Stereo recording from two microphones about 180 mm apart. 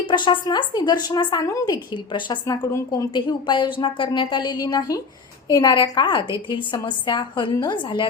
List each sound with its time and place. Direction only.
0.0 s speech: 25° left (ahead or behind)